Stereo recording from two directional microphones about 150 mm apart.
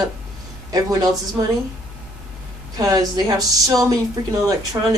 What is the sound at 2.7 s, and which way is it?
Speech, 25° right (ahead or behind).